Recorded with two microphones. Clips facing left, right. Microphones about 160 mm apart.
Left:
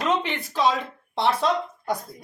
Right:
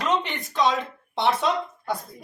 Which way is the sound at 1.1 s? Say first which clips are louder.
Even; centre (ahead or behind).